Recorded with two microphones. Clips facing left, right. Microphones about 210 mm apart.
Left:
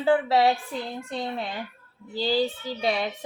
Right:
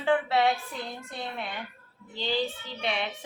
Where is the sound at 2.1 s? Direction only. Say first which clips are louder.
Left 5 dB; 35° left (ahead or behind).